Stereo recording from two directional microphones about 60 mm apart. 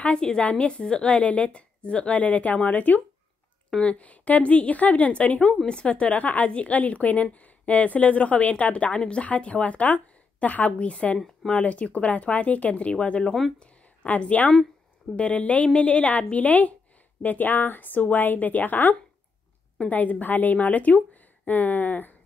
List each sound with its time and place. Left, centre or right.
0.0 s speech: centre
14.5 s a sound: centre
15.1 s speech: left